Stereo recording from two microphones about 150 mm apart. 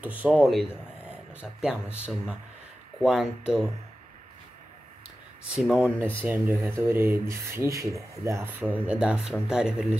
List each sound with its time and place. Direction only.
0.0 s speech: 10° right (ahead or behind)
5.6 s speech: 5° right (ahead or behind)